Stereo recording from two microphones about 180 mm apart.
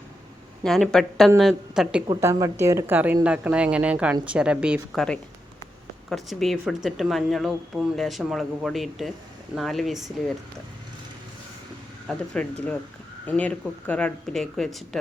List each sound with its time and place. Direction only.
0.6 s speech: 5° left (ahead or behind)
2.0 s speech: 15° right (ahead or behind)
6.1 s speech: centre (ahead or behind)
12.0 s speech: 5° left (ahead or behind)